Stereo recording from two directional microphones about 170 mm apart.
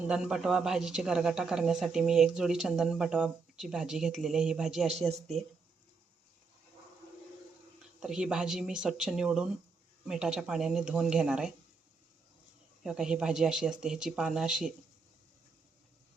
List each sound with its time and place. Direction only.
0.1 s speech: centre (ahead or behind)
8.0 s speech: 5° right (ahead or behind)
12.8 s speech: 5° right (ahead or behind)